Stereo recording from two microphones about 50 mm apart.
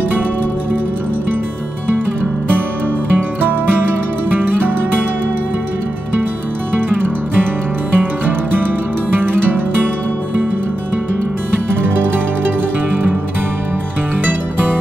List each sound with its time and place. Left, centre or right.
7.9 s music: right